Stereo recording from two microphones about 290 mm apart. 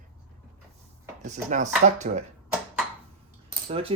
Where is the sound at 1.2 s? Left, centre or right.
Right.